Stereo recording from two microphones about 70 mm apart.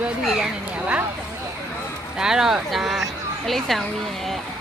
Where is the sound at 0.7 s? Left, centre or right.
Right.